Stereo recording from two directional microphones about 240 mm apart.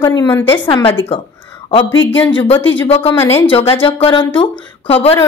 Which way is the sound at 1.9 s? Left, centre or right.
Left.